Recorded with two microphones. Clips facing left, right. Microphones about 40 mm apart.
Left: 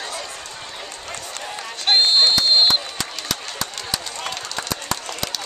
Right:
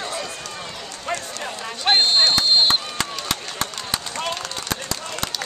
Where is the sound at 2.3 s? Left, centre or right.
Right.